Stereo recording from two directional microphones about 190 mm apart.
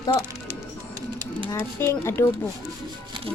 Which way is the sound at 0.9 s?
20° right (ahead or behind).